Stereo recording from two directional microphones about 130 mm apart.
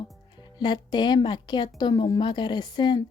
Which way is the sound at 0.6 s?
35° left (ahead or behind).